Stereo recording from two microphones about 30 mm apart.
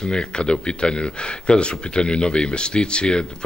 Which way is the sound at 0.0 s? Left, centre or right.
Left.